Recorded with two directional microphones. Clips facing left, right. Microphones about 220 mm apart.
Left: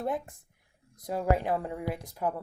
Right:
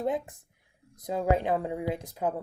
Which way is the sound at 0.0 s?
20° right (ahead or behind).